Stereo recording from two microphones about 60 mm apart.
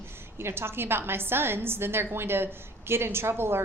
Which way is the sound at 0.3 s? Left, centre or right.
Right.